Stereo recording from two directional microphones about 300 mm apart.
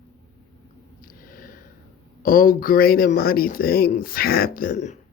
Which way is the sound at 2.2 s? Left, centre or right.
Left.